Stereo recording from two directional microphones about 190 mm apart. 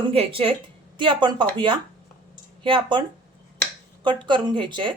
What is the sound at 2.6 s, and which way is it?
Speech, 25° right (ahead or behind).